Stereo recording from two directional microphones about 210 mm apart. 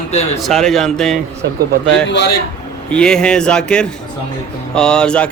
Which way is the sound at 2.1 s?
50° left (ahead or behind).